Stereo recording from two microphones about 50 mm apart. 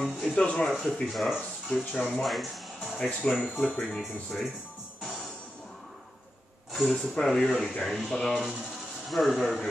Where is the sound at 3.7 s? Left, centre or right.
Centre.